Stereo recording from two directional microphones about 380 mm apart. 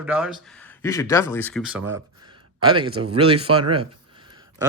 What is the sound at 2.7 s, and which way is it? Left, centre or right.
Speech, right.